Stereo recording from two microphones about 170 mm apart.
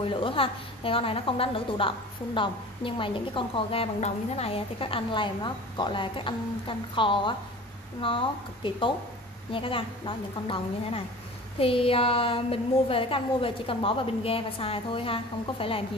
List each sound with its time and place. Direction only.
0.0 s a woman's voice: 30° left (ahead or behind)